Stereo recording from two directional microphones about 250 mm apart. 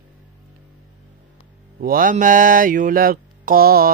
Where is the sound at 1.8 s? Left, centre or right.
Right.